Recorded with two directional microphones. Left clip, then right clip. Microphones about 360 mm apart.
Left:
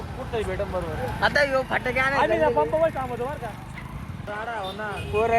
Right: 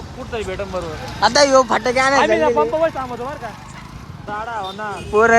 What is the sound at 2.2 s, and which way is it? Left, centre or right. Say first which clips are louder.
Speech: right 6 dB; right.